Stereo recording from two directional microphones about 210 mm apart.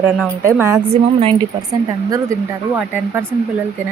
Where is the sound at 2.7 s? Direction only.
5° right (ahead or behind).